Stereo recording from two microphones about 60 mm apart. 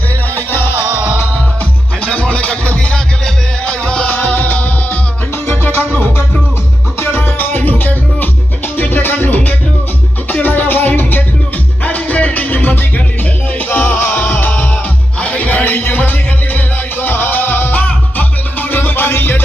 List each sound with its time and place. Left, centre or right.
0.3 s music: left
2.0 s music: centre
4.4 s music: left
7.0 s music: left